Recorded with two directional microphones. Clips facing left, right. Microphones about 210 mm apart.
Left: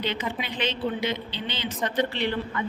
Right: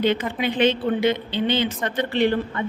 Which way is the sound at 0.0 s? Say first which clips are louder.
Right 8 dB; 50° right (ahead or behind).